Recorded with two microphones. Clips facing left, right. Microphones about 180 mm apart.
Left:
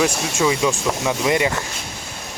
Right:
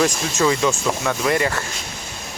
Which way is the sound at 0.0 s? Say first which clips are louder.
Even; 10° left (ahead or behind).